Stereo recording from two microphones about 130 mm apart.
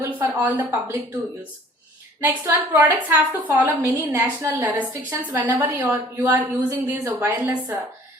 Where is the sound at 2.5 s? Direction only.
15° right (ahead or behind).